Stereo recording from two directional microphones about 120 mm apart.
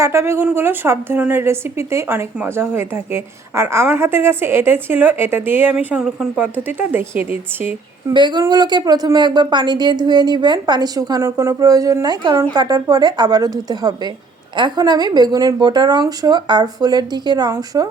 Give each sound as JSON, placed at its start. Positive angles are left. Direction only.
{"t": 0.0, "sound": "speech", "side_deg": -20}
{"t": 8.1, "sound": "speech", "side_deg": -40}